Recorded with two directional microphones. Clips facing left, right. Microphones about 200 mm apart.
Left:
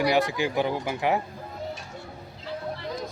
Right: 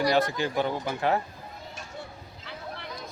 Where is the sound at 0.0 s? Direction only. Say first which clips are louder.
Left 1 dB; 15° left (ahead or behind).